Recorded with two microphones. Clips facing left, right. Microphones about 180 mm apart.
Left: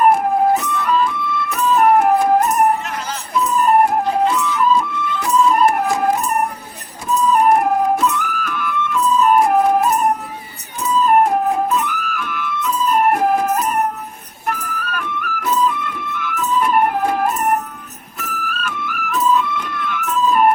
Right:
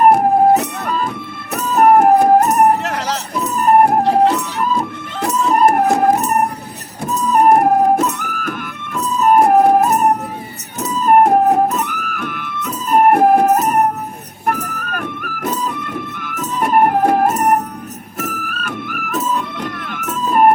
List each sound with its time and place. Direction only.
0.0 s music: 40° right (ahead or behind)
0.5 s music: 70° right (ahead or behind)
0.8 s music: 45° right (ahead or behind)
2.8 s a sound: 75° right (ahead or behind)
3.3 s music: 40° right (ahead or behind)
4.0 s music: 70° right (ahead or behind)
4.5 s music: 45° right (ahead or behind); by 5.3 s 65° right (ahead or behind)
5.5 s music: 45° right (ahead or behind)
19.5 s music: 65° right (ahead or behind)
20.1 s emergency vehicle: 45° right (ahead or behind)